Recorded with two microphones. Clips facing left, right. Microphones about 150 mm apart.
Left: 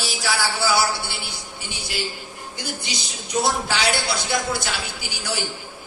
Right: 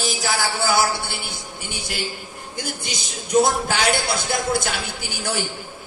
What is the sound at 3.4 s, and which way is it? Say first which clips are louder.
Speech: right 2 dB; 50° right (ahead or behind).